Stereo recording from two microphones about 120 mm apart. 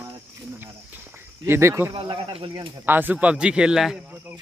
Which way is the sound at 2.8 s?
15° right (ahead or behind).